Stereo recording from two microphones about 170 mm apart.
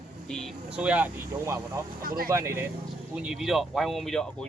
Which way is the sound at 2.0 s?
60° right (ahead or behind).